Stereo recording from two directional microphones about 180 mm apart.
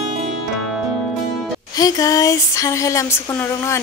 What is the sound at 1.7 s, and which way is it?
Speech, 20° left (ahead or behind).